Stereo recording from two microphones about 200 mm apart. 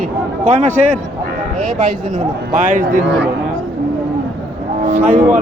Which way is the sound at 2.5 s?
40° right (ahead or behind).